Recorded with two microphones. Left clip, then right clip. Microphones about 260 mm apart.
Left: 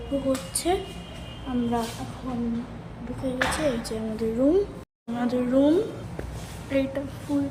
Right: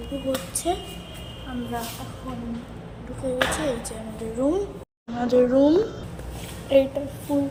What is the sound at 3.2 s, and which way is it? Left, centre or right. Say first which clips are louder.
Speech: right 4 dB; centre.